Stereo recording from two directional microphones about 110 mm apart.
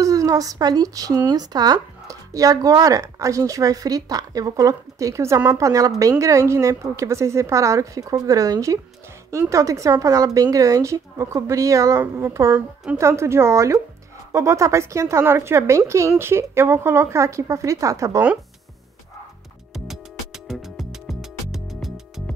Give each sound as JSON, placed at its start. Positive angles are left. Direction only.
{"t": 0.0, "sound": "a woman's voice", "side_deg": -30}
{"t": 19.7, "sound": "music", "side_deg": -5}